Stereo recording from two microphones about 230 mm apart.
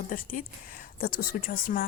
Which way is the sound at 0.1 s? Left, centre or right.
Left.